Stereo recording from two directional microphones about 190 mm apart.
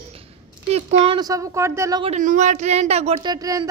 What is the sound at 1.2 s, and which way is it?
Speech, 20° right (ahead or behind).